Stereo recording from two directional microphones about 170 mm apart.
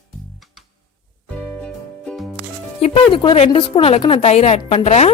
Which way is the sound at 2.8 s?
35° left (ahead or behind).